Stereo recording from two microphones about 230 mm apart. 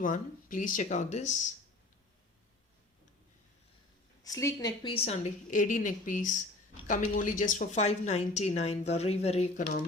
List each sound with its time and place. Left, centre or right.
0.0 s speech: left
4.2 s a woman's voice: centre